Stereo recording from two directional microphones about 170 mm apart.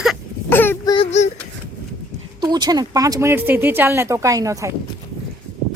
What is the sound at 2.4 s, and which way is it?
Speech, 25° right (ahead or behind).